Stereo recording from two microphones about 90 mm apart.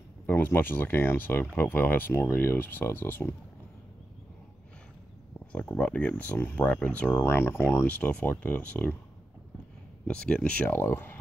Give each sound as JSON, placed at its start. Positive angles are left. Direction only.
{"t": 0.3, "sound": "speech", "side_deg": 20}
{"t": 5.5, "sound": "speech", "side_deg": 15}
{"t": 10.0, "sound": "speech", "side_deg": 10}